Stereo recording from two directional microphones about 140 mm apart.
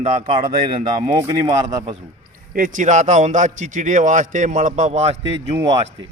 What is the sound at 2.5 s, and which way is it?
A man's voice, 70° right (ahead or behind).